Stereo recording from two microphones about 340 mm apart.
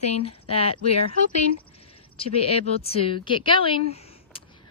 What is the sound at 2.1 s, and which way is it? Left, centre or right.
A woman's voice, centre.